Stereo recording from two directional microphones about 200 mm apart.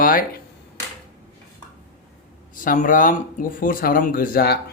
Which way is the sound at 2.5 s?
40° left (ahead or behind).